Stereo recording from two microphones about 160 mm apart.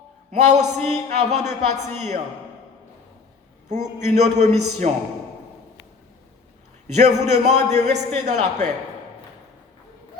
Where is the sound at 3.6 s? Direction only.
45° right (ahead or behind).